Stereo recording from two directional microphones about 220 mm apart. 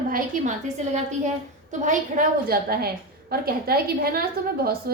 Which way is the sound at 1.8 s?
35° right (ahead or behind).